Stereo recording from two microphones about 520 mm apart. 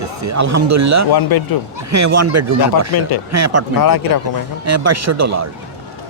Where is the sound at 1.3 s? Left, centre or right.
Left.